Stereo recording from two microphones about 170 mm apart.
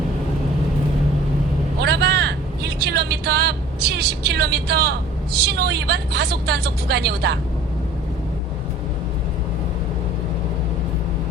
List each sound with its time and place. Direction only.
1.8 s vehicle: 75° right (ahead or behind)
5.5 s speech: 75° right (ahead or behind)